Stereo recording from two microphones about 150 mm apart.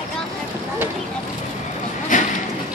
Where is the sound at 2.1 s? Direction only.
55° left (ahead or behind).